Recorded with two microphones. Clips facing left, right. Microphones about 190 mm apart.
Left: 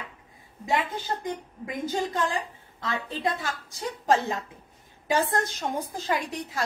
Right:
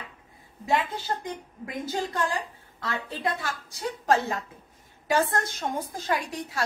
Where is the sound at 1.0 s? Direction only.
15° left (ahead or behind).